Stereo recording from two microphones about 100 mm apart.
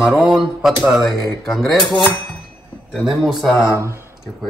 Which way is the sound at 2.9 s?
Centre (ahead or behind).